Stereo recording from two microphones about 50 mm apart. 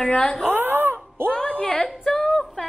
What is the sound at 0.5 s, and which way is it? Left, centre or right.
Wail, right.